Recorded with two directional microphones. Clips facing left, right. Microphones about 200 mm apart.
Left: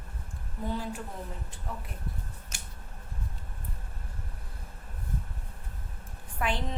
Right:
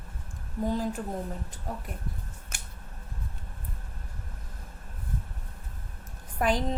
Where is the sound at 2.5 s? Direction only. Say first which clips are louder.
Right 4 dB; 55° right (ahead or behind).